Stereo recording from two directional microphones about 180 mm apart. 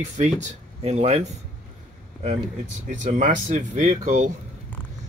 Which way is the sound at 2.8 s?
45° right (ahead or behind).